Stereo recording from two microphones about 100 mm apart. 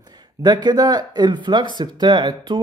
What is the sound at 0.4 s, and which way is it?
Speech, 45° right (ahead or behind).